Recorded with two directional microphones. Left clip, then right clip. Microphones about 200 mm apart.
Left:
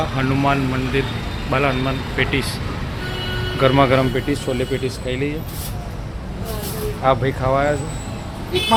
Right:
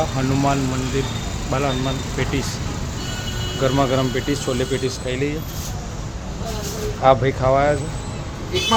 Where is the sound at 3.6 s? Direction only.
Centre (ahead or behind).